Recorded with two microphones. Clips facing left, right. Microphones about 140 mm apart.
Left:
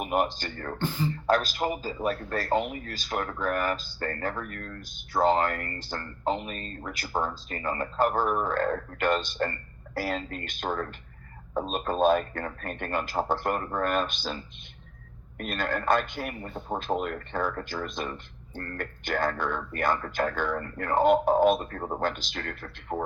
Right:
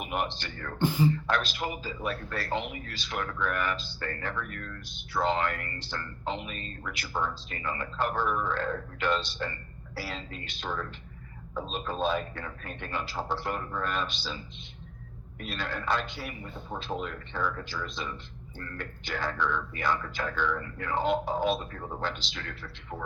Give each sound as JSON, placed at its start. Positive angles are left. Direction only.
{"t": 0.0, "sound": "speech", "side_deg": 40}
{"t": 0.8, "sound": "speech", "side_deg": -15}
{"t": 1.1, "sound": "speech", "side_deg": 40}